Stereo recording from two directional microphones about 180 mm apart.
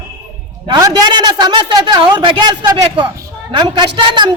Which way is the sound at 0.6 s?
20° right (ahead or behind).